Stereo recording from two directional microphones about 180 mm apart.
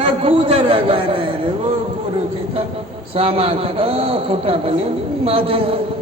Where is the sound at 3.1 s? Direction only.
30° right (ahead or behind).